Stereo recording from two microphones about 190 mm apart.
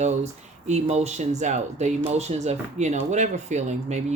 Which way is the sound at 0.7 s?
35° right (ahead or behind).